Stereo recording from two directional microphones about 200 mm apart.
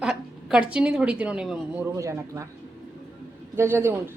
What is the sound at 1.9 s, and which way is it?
Speech, 15° right (ahead or behind).